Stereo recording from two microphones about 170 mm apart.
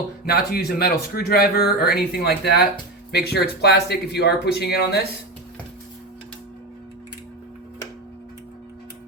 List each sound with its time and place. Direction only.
0.3 s speech: 65° left (ahead or behind)